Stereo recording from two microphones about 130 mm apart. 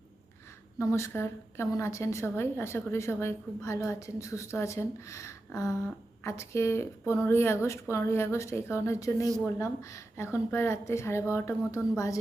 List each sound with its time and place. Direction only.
0.8 s a woman's voice: 20° left (ahead or behind)